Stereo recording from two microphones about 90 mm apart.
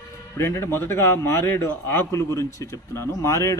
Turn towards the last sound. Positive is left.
turn(degrees=35)  # may be behind; listen again after turning